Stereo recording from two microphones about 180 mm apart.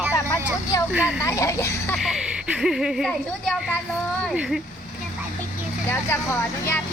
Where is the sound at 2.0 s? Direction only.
Centre (ahead or behind).